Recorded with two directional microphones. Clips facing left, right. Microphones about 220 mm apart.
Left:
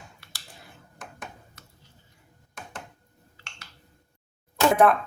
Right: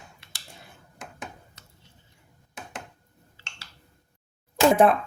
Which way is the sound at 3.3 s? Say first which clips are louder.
Even; 30° right (ahead or behind).